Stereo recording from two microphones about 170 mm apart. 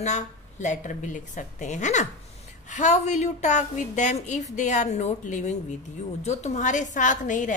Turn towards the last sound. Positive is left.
turn(degrees=50)  # may be behind; listen again after turning